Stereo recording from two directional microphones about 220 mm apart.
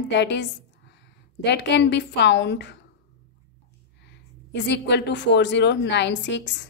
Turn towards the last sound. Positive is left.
turn(degrees=55)  # may be behind; listen again after turning